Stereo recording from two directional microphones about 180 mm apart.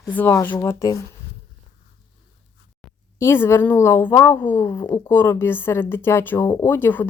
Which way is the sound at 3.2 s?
15° left (ahead or behind).